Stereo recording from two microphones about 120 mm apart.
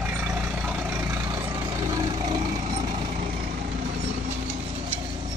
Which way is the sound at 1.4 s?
35° right (ahead or behind).